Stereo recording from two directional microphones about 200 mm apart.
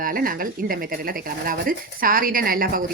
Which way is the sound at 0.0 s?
45° right (ahead or behind).